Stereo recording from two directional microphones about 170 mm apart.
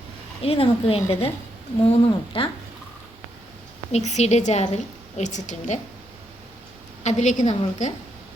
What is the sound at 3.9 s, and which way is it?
A woman's voice, 40° left (ahead or behind).